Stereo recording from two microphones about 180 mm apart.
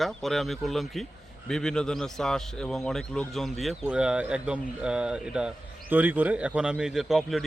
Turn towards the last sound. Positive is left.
turn(degrees=0)  # may be behind; listen again after turning